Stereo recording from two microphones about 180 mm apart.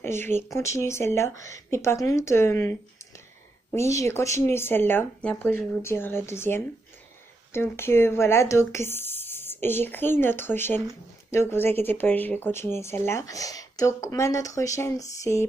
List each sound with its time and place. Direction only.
0.0 s speech: 15° left (ahead or behind)
3.7 s speech: 15° left (ahead or behind)